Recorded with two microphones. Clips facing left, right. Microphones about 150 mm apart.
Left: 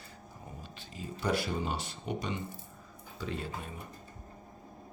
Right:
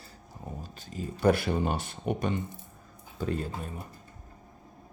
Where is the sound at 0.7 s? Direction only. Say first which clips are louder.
Right 4 dB; 45° right (ahead or behind).